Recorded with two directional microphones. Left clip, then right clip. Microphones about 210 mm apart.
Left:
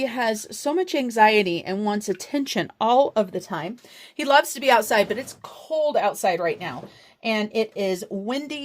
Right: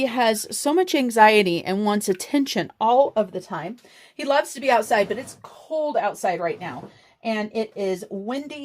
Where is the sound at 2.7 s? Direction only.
15° left (ahead or behind).